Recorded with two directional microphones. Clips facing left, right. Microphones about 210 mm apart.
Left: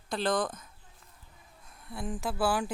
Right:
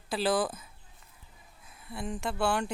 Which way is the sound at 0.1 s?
5° right (ahead or behind).